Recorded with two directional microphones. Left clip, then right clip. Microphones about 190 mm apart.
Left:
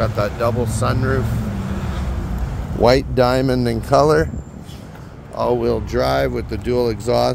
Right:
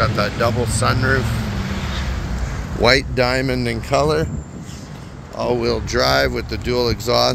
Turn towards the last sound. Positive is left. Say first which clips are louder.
# even
turn(degrees=25)  # may be behind; listen again after turning